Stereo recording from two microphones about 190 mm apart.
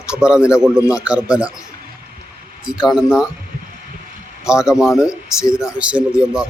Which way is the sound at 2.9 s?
5° right (ahead or behind).